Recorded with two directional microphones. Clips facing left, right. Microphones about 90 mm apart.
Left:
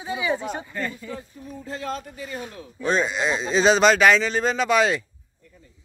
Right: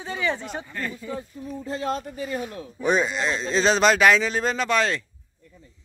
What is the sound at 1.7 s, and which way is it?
Speech, 35° right (ahead or behind).